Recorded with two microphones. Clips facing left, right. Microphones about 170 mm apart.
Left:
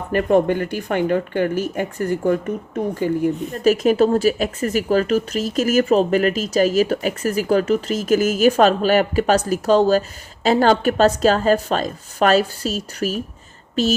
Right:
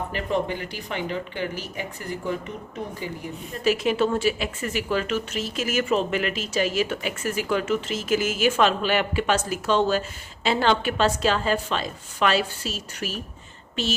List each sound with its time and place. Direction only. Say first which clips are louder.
0.1 s speech: left 13 dB; 50° left (ahead or behind)